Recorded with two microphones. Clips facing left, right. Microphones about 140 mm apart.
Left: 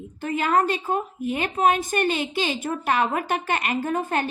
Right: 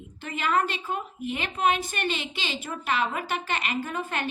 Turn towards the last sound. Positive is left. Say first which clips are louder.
# left 6 dB
turn(degrees=40)  # may be behind; listen again after turning